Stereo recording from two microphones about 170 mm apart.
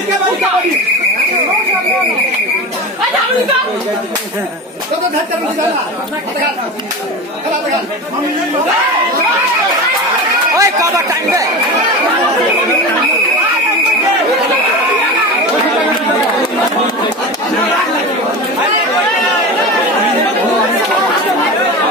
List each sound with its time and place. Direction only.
10.6 s speech: 20° right (ahead or behind)